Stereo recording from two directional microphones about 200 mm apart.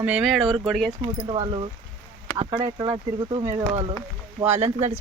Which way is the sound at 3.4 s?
15° right (ahead or behind).